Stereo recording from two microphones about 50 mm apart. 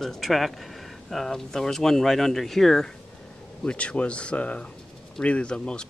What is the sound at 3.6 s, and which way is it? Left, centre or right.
Speech, left.